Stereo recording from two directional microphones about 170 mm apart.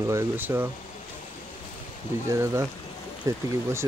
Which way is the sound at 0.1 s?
10° right (ahead or behind).